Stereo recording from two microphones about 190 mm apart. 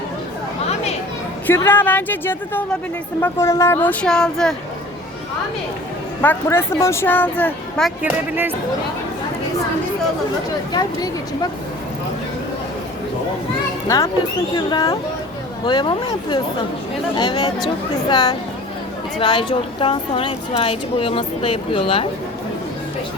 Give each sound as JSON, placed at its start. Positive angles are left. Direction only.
{"t": 1.5, "sound": "a woman's voice", "side_deg": 10}
{"t": 6.2, "sound": "a woman's voice", "side_deg": 10}
{"t": 8.0, "sound": "speech", "side_deg": -10}
{"t": 10.7, "sound": "speech", "side_deg": 20}
{"t": 13.8, "sound": "a woman's voice", "side_deg": 15}